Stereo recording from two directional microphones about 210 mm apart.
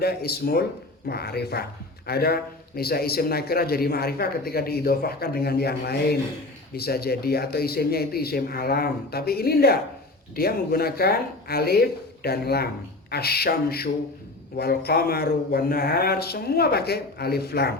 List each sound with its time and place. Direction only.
0.0 s a man's voice: 50° left (ahead or behind)